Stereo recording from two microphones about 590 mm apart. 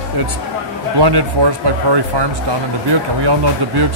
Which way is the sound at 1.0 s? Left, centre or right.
Right.